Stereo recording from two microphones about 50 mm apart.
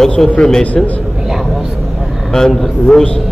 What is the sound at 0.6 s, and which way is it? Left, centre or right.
Speech, left.